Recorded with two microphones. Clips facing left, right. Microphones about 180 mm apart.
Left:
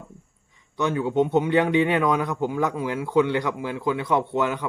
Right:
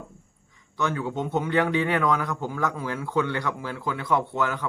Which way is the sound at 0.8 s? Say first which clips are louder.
Left 6 dB; 20° left (ahead or behind).